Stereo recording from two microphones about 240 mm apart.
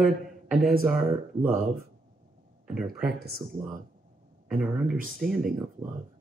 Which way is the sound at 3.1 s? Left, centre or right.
Right.